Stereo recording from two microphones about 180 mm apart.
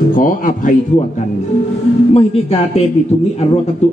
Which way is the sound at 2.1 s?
35° left (ahead or behind).